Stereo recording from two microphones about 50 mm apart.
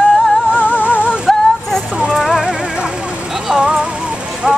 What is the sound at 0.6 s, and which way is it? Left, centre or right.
Music, left.